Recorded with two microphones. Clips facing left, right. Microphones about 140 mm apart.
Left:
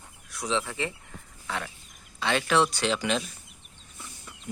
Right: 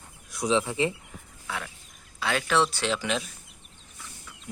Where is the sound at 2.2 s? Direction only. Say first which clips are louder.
Left 1 dB; 5° right (ahead or behind).